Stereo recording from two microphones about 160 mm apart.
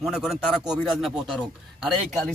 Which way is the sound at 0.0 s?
Centre (ahead or behind).